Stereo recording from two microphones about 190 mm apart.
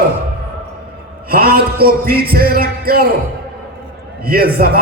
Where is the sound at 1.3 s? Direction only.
55° right (ahead or behind).